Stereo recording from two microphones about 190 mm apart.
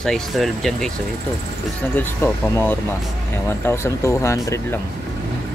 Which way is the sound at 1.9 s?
10° left (ahead or behind).